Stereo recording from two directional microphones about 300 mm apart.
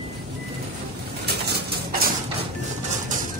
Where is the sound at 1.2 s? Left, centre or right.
Right.